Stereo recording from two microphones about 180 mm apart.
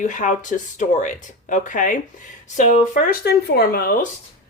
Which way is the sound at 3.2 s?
60° left (ahead or behind).